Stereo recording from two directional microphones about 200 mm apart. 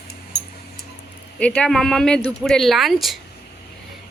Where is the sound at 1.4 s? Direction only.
5° left (ahead or behind).